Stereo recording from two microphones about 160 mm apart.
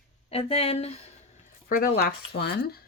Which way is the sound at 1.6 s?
65° left (ahead or behind).